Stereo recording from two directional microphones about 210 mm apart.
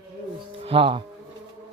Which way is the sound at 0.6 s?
25° right (ahead or behind).